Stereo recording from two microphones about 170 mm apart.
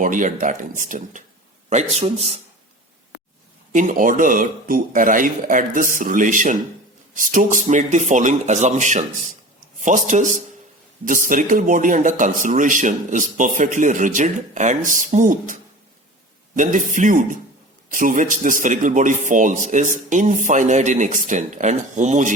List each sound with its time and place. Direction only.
0.0 s a man's voice: 50° right (ahead or behind)
3.7 s speech: 50° right (ahead or behind)
16.6 s speech: 50° right (ahead or behind)